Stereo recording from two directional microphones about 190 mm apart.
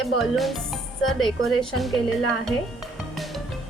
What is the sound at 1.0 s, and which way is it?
Speech, centre (ahead or behind).